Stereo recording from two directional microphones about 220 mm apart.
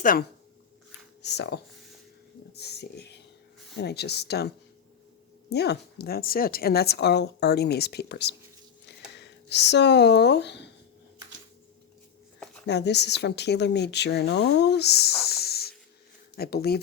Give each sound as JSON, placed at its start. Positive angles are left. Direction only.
{"t": 0.0, "sound": "speech", "side_deg": 40}
{"t": 1.2, "sound": "a woman's voice", "side_deg": 50}
{"t": 2.5, "sound": "a sound", "side_deg": 45}
{"t": 3.8, "sound": "a woman's voice", "side_deg": 50}
{"t": 12.6, "sound": "a woman's voice", "side_deg": 50}